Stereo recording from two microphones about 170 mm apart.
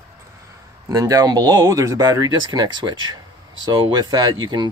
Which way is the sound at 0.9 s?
20° right (ahead or behind).